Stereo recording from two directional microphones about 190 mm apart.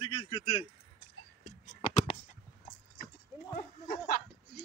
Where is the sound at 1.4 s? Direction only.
35° left (ahead or behind).